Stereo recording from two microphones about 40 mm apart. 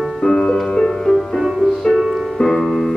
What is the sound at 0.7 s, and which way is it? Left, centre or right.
Music, centre.